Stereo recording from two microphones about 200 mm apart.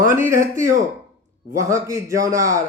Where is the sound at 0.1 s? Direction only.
15° right (ahead or behind).